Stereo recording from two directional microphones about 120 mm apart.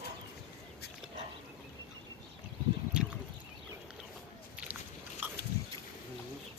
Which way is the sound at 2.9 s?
10° right (ahead or behind).